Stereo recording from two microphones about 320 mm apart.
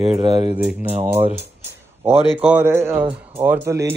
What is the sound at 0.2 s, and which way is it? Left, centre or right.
Speech, centre.